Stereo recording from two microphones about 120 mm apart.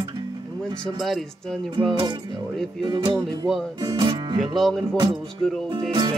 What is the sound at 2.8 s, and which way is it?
Speech, 40° right (ahead or behind).